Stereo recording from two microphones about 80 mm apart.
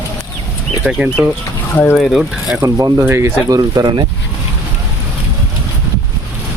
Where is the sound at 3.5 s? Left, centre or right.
Right.